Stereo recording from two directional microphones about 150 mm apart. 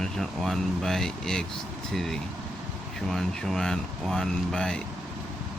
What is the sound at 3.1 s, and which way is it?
Speech, 5° left (ahead or behind).